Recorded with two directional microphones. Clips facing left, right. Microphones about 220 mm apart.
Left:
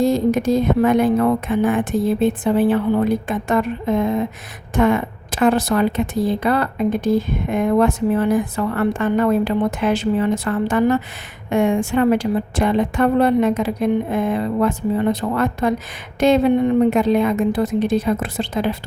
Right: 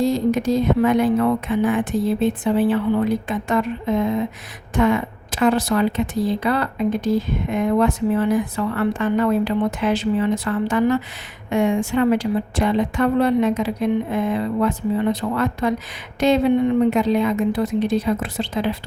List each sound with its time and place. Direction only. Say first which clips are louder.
0.0 s speech: left 2 dB; 50° left (ahead or behind)